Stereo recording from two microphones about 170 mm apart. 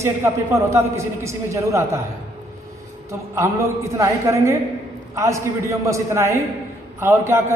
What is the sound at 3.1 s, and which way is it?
A man's voice, 15° right (ahead or behind).